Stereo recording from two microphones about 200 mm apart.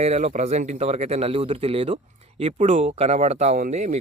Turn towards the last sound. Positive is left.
turn(degrees=-35)  # may be behind; listen again after turning